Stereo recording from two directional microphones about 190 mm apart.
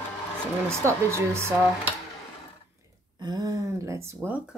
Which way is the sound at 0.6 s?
15° right (ahead or behind).